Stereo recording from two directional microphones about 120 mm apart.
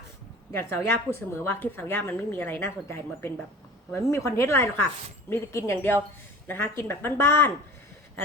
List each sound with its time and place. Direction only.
0.5 s a woman's voice: 20° left (ahead or behind)